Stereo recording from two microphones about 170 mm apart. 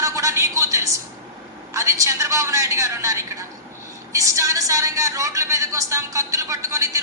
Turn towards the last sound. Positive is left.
turn(degrees=-20)  # may be behind; listen again after turning